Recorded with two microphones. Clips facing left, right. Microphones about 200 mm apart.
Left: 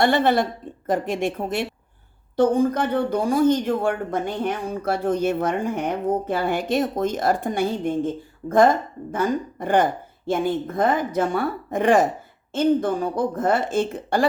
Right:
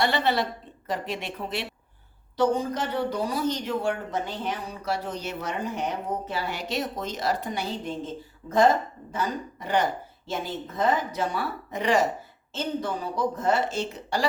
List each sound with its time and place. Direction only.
0.0 s speech: 50° left (ahead or behind)